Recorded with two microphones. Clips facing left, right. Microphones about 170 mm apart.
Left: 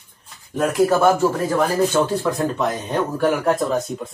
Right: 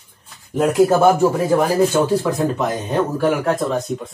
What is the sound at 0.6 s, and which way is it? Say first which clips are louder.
Speech: right 3 dB; 20° right (ahead or behind).